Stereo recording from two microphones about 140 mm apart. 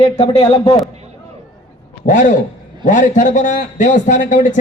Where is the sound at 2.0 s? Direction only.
60° left (ahead or behind).